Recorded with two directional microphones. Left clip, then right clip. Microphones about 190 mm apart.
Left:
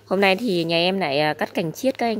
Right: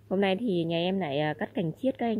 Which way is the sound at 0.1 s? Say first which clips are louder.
Left 8 dB; 5° left (ahead or behind).